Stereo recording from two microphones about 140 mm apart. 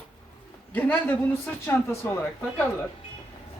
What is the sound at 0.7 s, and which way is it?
A man's voice, 10° left (ahead or behind).